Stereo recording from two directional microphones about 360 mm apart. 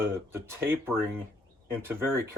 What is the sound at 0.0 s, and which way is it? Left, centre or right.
Speech, centre.